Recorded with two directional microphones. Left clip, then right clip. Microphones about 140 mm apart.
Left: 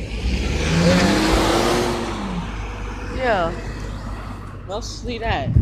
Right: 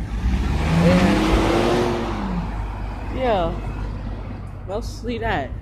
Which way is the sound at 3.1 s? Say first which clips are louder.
Left 1 dB; 20° right (ahead or behind).